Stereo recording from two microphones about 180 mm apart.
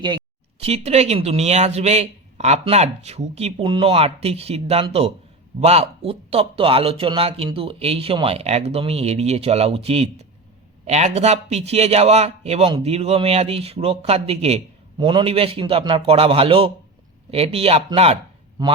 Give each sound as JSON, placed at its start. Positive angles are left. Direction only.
{"t": 0.6, "sound": "speech", "side_deg": -35}